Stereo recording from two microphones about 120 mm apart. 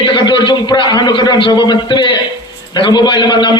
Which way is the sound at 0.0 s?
40° left (ahead or behind).